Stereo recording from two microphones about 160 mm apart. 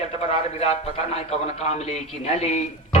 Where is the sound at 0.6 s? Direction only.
40° left (ahead or behind).